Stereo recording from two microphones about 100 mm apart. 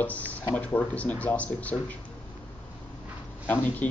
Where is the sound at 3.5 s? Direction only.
15° left (ahead or behind).